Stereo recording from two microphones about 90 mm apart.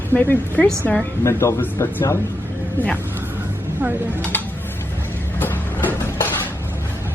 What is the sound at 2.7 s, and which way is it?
Speech, 15° left (ahead or behind).